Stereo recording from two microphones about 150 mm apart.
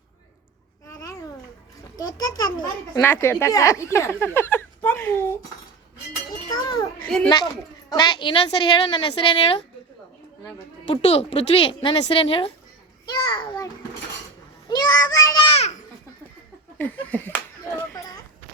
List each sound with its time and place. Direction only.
0.9 s babbling: 20° left (ahead or behind)
2.0 s a child's voice: 25° left (ahead or behind)
3.0 s a woman's voice: 15° left (ahead or behind)
4.4 s a sound: 15° left (ahead or behind)
6.5 s children playing: 25° left (ahead or behind)
7.0 s children playing: 10° left (ahead or behind)
7.9 s a woman's voice: 30° left (ahead or behind)
10.8 s a woman's voice: 45° left (ahead or behind)
14.7 s speech: 25° left (ahead or behind)
15.4 s a child's voice: 40° left (ahead or behind)
16.7 s speech: 10° left (ahead or behind)